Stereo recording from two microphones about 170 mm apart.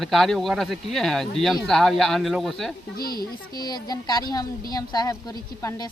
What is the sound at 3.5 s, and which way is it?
A woman's voice, 25° left (ahead or behind).